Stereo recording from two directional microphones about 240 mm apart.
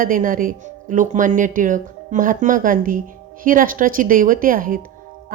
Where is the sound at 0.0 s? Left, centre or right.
Right.